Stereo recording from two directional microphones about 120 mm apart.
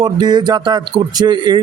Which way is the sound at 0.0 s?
35° right (ahead or behind).